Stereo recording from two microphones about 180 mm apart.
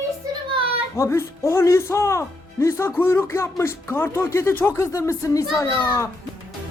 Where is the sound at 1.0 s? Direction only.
15° left (ahead or behind).